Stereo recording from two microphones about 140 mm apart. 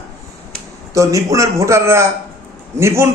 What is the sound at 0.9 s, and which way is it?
A man's voice, 25° right (ahead or behind).